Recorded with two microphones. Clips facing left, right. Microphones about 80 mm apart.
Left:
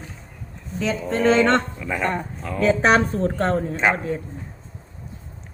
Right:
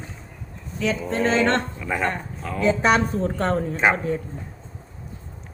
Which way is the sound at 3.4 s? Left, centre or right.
Left.